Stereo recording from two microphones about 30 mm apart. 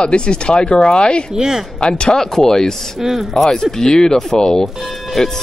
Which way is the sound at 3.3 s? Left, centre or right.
Left.